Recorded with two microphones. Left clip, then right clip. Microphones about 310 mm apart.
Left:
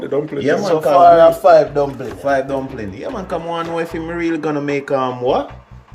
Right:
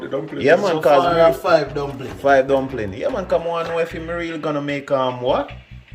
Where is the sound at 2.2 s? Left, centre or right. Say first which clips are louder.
Right 3 dB; centre.